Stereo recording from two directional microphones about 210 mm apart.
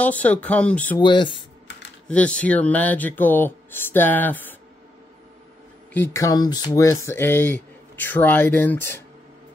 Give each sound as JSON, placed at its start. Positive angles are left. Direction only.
{"t": 0.0, "sound": "speech", "side_deg": 5}
{"t": 1.0, "sound": "speech", "side_deg": 20}
{"t": 2.0, "sound": "speech", "side_deg": 5}
{"t": 5.9, "sound": "speech", "side_deg": 15}